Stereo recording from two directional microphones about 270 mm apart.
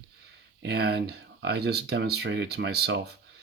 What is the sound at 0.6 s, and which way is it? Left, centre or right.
Speech, right.